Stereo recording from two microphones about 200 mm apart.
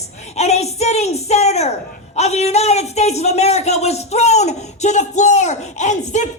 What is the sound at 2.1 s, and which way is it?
A man's voice, 35° left (ahead or behind).